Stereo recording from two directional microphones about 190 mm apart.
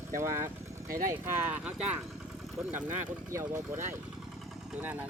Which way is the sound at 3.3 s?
15° right (ahead or behind).